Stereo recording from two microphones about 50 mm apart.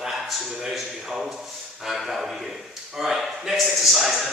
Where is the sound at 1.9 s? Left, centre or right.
Centre.